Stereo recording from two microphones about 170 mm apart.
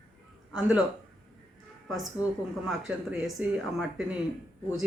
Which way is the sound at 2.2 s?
20° left (ahead or behind).